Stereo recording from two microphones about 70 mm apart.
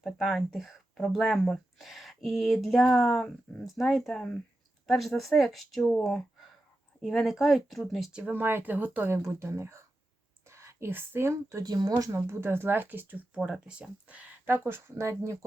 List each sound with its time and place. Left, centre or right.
0.0 s speech: centre
8.3 s speech: right
9.0 s speech: right
11.6 s speech: right
12.1 s speech: right
13.4 s speech: centre
14.4 s speech: right